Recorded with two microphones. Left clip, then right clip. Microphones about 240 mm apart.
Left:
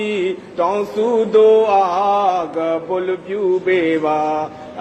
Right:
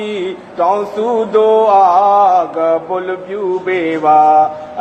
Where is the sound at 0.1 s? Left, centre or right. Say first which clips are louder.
Even; left.